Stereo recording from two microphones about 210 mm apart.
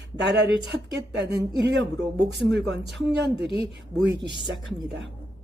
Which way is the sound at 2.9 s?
55° right (ahead or behind).